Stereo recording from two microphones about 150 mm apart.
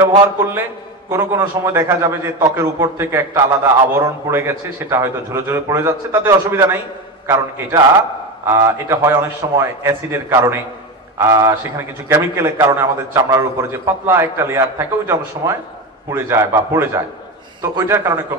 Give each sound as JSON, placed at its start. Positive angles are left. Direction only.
{"t": 1.1, "sound": "a man's voice", "side_deg": -15}